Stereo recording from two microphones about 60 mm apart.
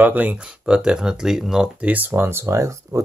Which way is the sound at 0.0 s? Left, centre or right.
Right.